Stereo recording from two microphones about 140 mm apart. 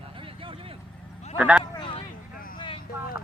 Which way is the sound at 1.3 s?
10° right (ahead or behind).